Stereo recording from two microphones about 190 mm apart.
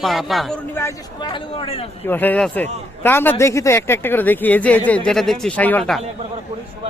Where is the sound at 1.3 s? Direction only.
30° left (ahead or behind).